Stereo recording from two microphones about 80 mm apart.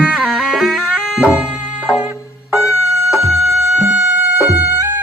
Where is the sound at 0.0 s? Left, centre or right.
Centre.